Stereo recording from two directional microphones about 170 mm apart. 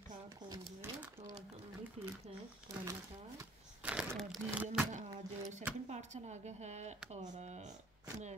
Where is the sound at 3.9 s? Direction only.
5° right (ahead or behind).